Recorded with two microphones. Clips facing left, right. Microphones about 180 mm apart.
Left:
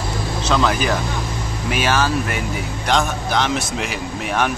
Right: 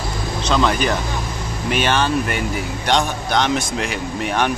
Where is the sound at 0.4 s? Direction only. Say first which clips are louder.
Right 1 dB; 5° left (ahead or behind).